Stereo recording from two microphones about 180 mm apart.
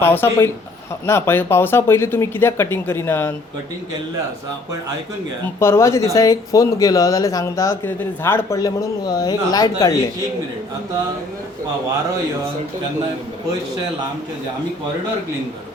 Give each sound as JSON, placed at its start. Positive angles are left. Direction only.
{"t": 0.0, "sound": "speech", "side_deg": 10}
{"t": 5.5, "sound": "speech", "side_deg": 15}